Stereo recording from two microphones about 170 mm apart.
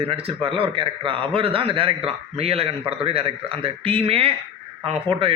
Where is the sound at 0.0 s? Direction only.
35° right (ahead or behind).